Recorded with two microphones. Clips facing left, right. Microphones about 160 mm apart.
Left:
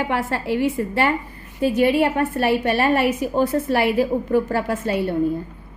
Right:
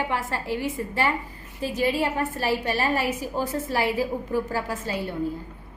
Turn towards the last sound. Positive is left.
turn(degrees=65)  # may be behind; listen again after turning